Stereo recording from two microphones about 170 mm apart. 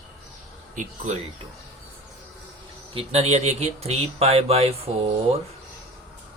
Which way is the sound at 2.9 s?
35° right (ahead or behind).